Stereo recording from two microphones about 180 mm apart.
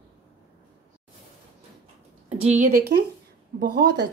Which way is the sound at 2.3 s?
35° right (ahead or behind).